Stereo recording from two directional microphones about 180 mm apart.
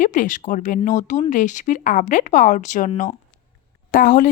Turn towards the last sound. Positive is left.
turn(degrees=50)  # may be behind; listen again after turning